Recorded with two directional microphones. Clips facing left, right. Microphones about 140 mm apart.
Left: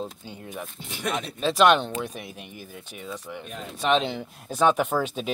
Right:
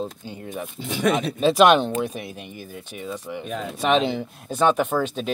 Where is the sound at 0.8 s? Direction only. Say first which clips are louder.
Right 10 dB; 90° right.